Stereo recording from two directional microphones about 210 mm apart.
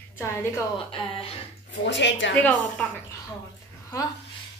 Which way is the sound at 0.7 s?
25° left (ahead or behind).